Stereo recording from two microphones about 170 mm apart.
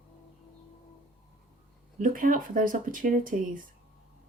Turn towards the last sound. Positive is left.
turn(degrees=-50)  # may be behind; listen again after turning